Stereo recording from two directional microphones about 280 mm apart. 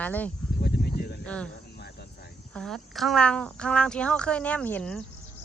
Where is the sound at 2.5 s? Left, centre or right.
Centre.